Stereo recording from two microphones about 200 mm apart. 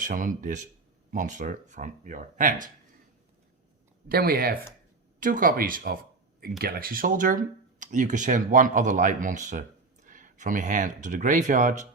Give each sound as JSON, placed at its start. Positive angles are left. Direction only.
{"t": 0.0, "sound": "speech", "side_deg": -40}
{"t": 4.1, "sound": "speech", "side_deg": -50}